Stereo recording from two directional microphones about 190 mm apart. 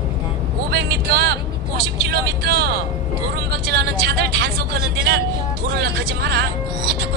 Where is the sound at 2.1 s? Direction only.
55° right (ahead or behind).